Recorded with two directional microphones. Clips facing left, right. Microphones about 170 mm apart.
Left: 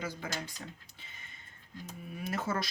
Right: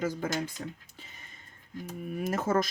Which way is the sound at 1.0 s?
40° right (ahead or behind).